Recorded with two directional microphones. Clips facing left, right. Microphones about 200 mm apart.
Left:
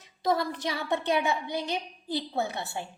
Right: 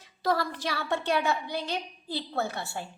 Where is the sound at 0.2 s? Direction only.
20° left (ahead or behind).